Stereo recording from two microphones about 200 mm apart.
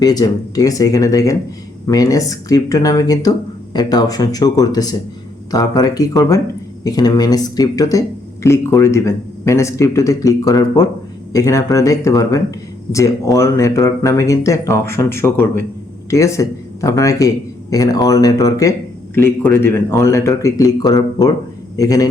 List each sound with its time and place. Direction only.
0.0 s a man's voice: 20° left (ahead or behind)